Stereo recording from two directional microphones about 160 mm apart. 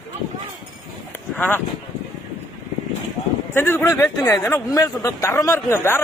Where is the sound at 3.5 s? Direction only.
15° left (ahead or behind).